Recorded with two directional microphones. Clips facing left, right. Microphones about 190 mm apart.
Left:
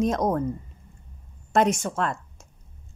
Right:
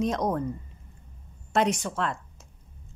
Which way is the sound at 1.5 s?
45° left (ahead or behind).